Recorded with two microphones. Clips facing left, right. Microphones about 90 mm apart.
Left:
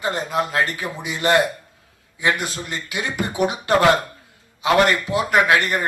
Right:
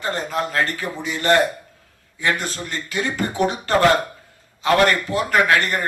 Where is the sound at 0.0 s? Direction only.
15° left (ahead or behind).